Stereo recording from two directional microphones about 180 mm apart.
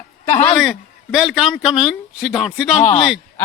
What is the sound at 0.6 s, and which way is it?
A man's voice, 5° right (ahead or behind).